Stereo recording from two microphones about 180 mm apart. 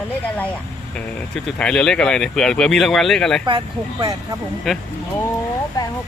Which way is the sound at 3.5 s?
20° right (ahead or behind).